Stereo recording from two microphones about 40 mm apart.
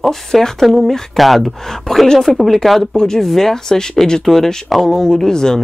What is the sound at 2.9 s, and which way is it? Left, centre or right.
Speech, centre.